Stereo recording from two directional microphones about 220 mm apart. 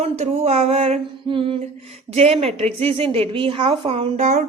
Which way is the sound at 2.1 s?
25° right (ahead or behind).